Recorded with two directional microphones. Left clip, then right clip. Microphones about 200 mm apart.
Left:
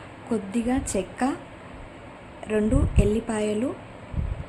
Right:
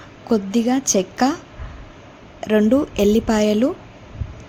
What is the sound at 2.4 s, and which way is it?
A woman's voice, 35° right (ahead or behind).